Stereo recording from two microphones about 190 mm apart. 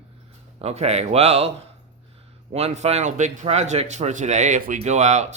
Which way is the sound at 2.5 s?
35° right (ahead or behind).